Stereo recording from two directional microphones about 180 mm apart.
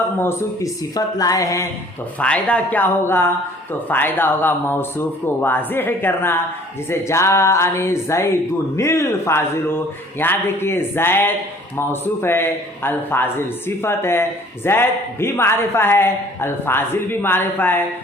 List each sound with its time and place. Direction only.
0.2 s speech: 15° left (ahead or behind)
2.1 s a man's voice: 5° left (ahead or behind)